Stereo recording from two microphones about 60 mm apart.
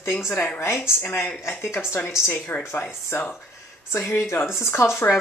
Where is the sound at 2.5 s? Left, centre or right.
Left.